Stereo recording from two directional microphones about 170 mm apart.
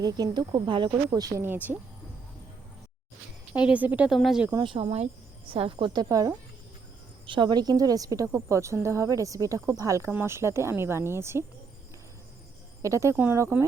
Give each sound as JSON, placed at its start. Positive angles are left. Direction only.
{"t": 0.0, "sound": "speech", "side_deg": -25}
{"t": 3.5, "sound": "a woman's voice", "side_deg": -5}
{"t": 4.5, "sound": "a woman's voice", "side_deg": -30}
{"t": 12.8, "sound": "a woman's voice", "side_deg": -20}